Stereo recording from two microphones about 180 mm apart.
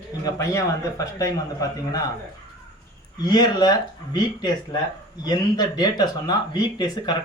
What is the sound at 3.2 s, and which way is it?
Speech, 25° left (ahead or behind).